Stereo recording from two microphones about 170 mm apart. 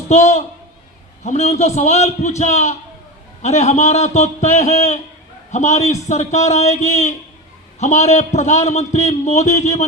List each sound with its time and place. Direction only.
0.1 s a man's voice: 40° left (ahead or behind)